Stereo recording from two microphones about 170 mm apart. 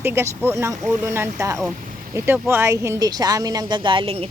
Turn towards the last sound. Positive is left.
turn(degrees=-35)  # may be behind; listen again after turning